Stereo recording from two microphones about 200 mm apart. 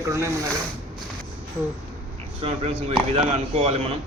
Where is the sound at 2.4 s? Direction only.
30° right (ahead or behind).